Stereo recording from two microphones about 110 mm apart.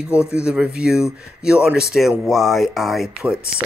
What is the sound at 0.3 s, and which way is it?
Speech, 10° right (ahead or behind).